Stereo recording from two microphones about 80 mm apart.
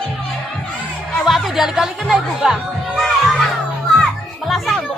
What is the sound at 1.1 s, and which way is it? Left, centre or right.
Music, centre.